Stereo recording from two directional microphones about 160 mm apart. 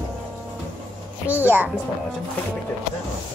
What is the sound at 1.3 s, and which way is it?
Speech, 10° right (ahead or behind).